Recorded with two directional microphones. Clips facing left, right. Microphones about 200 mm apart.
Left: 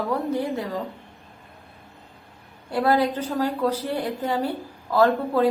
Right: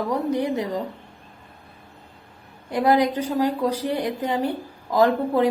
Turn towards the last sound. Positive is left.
turn(degrees=-15)  # may be behind; listen again after turning